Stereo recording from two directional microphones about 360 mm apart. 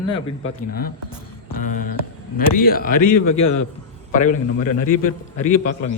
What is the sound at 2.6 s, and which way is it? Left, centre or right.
Speech, left.